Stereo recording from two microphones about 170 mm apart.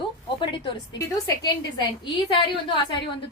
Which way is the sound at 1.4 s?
25° left (ahead or behind).